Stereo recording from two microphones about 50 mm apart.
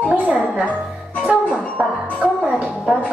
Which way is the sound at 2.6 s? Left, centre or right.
Centre.